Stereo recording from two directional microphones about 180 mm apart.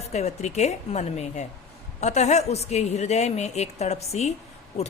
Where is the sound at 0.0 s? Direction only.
40° left (ahead or behind).